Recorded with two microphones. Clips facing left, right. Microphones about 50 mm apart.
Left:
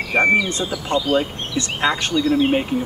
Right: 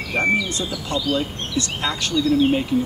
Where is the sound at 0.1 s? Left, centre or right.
Left.